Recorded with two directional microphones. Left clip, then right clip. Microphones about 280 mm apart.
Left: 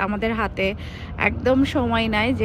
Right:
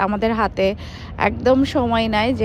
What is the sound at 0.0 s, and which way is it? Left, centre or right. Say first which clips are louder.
Speech: right 4 dB; centre.